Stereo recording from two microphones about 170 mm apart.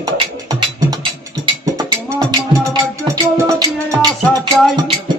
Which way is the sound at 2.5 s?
20° right (ahead or behind).